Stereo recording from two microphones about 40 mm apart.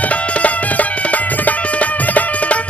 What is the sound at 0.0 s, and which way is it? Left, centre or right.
Music, left.